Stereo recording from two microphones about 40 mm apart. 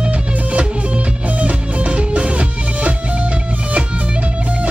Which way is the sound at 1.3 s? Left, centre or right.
Right.